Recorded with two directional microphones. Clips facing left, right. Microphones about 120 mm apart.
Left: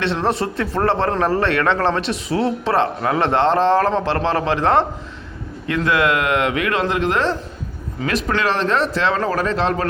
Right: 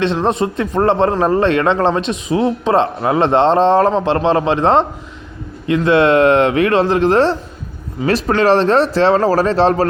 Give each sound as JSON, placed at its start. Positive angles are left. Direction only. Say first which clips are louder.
{"t": 0.0, "sound": "speech", "louder": "right 4 dB", "side_deg": -20}